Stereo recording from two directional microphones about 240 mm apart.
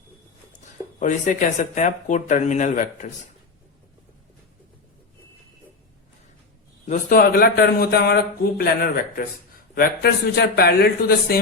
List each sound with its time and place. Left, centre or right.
0.9 s a man's voice: left
6.8 s a man's voice: left